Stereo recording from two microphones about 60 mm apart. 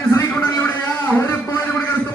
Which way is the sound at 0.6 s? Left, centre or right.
Left.